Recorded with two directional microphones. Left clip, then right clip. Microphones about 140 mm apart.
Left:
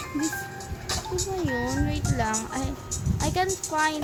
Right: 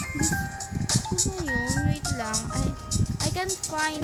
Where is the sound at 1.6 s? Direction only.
70° right (ahead or behind).